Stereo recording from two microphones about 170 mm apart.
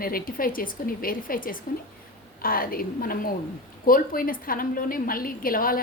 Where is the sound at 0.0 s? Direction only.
55° left (ahead or behind).